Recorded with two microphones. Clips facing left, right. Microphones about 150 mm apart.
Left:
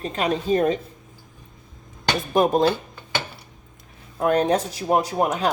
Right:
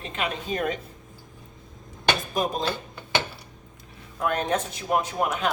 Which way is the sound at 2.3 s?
60° left (ahead or behind).